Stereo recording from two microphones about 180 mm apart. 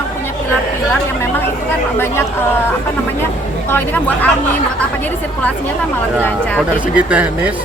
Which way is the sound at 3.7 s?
10° left (ahead or behind).